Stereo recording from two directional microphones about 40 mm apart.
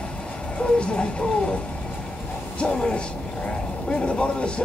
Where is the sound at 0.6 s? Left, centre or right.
Left.